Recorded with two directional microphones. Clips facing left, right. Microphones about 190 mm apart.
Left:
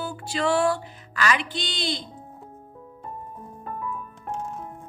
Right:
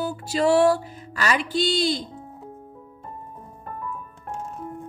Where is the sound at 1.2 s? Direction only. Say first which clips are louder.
Right 1 dB; 40° right (ahead or behind).